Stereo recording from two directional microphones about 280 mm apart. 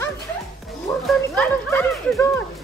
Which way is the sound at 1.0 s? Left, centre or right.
Centre.